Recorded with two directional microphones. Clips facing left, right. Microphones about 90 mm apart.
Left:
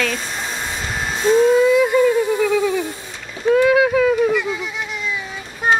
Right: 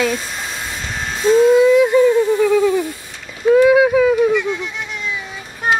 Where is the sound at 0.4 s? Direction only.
5° left (ahead or behind).